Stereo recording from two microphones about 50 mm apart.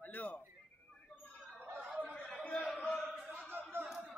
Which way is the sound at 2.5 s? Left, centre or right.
Centre.